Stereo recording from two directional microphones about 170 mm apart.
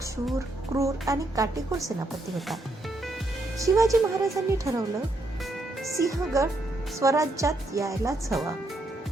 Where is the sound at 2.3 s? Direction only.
Centre (ahead or behind).